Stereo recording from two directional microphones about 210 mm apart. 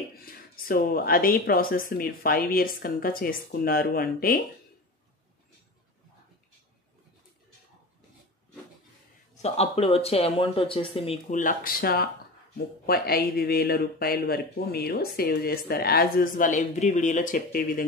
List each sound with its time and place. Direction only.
0.1 s speech: 45° left (ahead or behind)
9.4 s speech: 30° left (ahead or behind)